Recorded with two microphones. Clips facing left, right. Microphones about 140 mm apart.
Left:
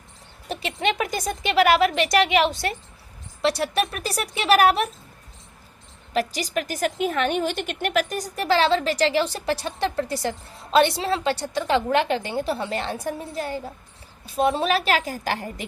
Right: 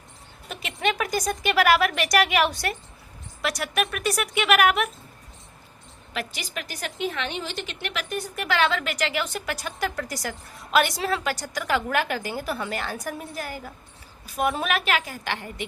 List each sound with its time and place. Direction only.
0.4 s speech: 30° left (ahead or behind)
6.1 s speech: 40° left (ahead or behind)